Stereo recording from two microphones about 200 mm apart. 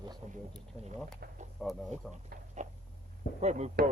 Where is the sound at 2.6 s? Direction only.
35° right (ahead or behind).